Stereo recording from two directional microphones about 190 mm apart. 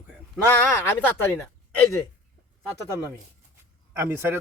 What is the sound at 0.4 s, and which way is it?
Speech, 10° left (ahead or behind).